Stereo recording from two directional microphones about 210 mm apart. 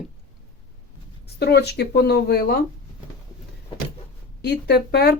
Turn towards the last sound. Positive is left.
turn(degrees=50)  # may be behind; listen again after turning